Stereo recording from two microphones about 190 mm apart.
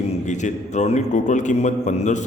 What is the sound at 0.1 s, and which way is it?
A man's voice, 40° left (ahead or behind).